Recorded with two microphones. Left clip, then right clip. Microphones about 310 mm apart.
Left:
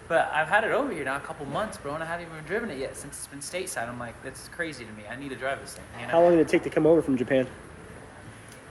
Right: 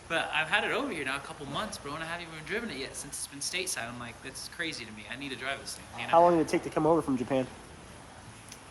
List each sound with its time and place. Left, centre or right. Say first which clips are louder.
0.1 s speech: left 6 dB; centre
6.1 s speech: left 3 dB; right